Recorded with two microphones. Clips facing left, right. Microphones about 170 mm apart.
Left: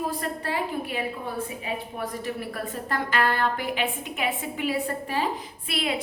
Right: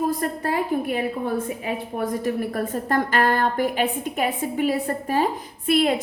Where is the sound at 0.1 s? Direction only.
45° right (ahead or behind).